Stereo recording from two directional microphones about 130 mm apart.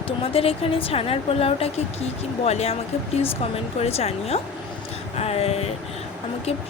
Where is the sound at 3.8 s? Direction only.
50° left (ahead or behind).